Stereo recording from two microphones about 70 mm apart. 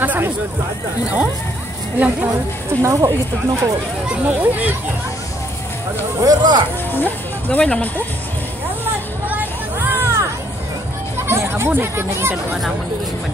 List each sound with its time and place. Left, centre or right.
0.0 s speech: right
2.8 s speech: right
4.1 s speech: right
6.2 s speech: right
7.0 s speech: left
9.8 s hubbub: right
11.2 s hubbub: right
11.7 s speech: right